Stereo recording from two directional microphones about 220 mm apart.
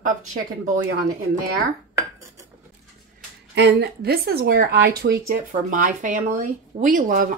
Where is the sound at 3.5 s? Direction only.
50° right (ahead or behind).